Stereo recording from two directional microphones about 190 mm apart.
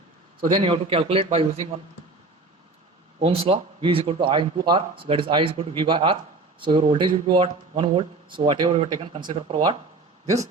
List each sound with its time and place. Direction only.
0.3 s speech: 25° right (ahead or behind)
3.2 s speech: 30° right (ahead or behind)